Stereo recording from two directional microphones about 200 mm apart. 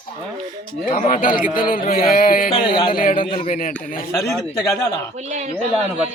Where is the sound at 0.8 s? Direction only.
40° left (ahead or behind).